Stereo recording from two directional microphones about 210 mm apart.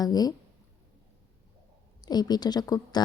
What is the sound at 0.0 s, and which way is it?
Speech, 20° left (ahead or behind).